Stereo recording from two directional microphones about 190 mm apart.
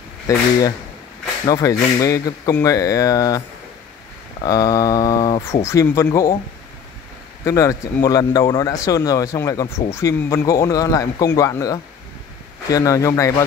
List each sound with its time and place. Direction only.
0.3 s speech: 20° left (ahead or behind)
7.4 s speech: 15° left (ahead or behind)